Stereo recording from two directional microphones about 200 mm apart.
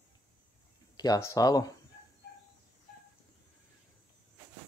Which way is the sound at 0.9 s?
20° left (ahead or behind).